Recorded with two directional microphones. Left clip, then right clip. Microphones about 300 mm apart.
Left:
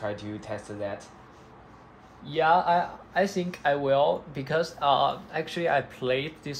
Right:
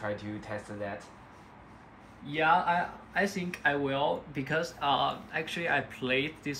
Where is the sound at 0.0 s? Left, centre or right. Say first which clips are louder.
Left 3 dB; centre.